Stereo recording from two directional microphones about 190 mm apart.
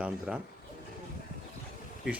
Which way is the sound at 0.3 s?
5° right (ahead or behind).